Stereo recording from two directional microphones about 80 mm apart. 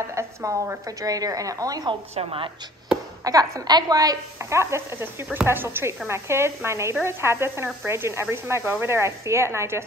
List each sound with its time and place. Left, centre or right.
0.1 s a woman's voice: right
3.3 s a woman's voice: right